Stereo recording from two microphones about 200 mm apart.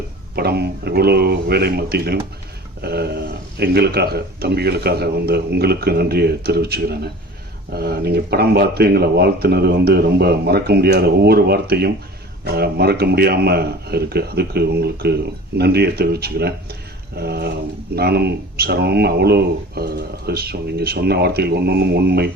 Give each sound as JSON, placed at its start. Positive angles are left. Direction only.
{"t": 0.3, "sound": "speech", "side_deg": -55}